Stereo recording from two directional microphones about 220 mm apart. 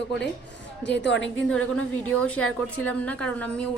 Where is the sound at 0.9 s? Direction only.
55° left (ahead or behind).